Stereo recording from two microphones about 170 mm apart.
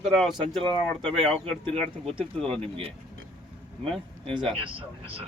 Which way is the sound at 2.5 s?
35° right (ahead or behind).